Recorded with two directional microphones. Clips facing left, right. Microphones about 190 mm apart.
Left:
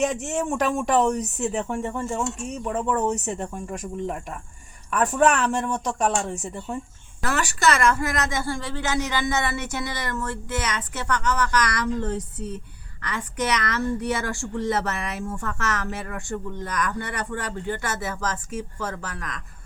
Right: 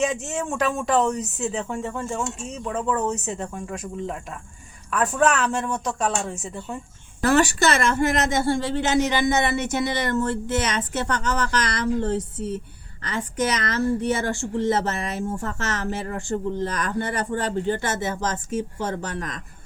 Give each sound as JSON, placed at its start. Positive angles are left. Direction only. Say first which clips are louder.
{"t": 0.4, "sound": "speech", "louder": "even", "side_deg": 10}
{"t": 1.2, "sound": "speech", "louder": "left 1 dB", "side_deg": 0}
{"t": 1.8, "sound": "speech", "louder": "left 1 dB", "side_deg": 10}
{"t": 5.2, "sound": "speech", "louder": "left 1 dB", "side_deg": -5}
{"t": 6.0, "sound": "speech", "louder": "left 3 dB", "side_deg": 10}
{"t": 6.3, "sound": "speech", "louder": "left 1 dB", "side_deg": 0}
{"t": 7.2, "sound": "speech", "louder": "right 7 dB", "side_deg": -25}